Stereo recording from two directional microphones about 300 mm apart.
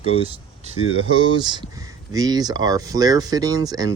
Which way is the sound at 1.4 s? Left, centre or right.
Centre.